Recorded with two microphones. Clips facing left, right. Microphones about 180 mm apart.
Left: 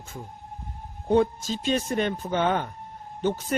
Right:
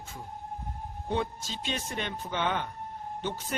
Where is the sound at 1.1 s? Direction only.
45° left (ahead or behind).